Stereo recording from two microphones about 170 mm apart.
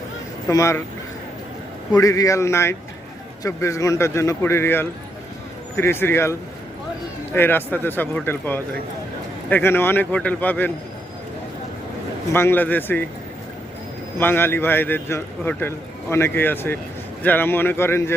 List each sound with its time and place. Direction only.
0.4 s a man's voice: 15° left (ahead or behind)
2.0 s a man's voice: 20° left (ahead or behind)
7.3 s a man's voice: 10° left (ahead or behind)
12.3 s a man's voice: 15° left (ahead or behind)
14.2 s a man's voice: 10° left (ahead or behind)